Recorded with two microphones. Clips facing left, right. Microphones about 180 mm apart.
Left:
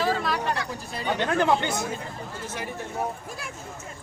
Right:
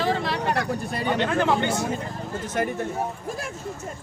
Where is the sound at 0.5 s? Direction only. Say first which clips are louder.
Right 6 dB; 55° right (ahead or behind).